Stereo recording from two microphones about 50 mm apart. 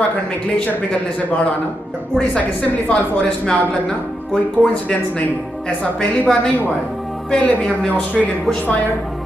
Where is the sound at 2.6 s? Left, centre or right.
Left.